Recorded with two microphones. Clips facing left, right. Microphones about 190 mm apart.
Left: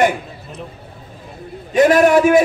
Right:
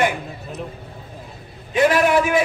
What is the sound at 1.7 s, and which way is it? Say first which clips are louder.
Speech: left 5 dB; 45° left (ahead or behind).